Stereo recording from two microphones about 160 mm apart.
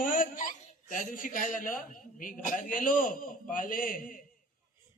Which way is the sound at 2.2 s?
55° left (ahead or behind).